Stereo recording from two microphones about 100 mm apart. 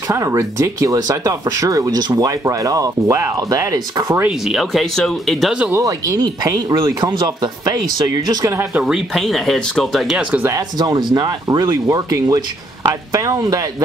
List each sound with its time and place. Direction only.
0.1 s speech: 30° right (ahead or behind)
4.5 s speech: centre (ahead or behind)
5.8 s speech: 35° right (ahead or behind)
8.5 s speech: 25° right (ahead or behind)
8.8 s speech: centre (ahead or behind)
10.8 s speech: 45° right (ahead or behind)